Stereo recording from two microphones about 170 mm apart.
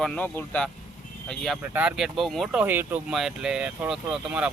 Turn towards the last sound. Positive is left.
turn(degrees=-5)  # may be behind; listen again after turning